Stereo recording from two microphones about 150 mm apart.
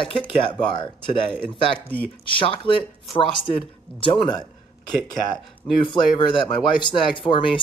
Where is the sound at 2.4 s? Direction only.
35° left (ahead or behind).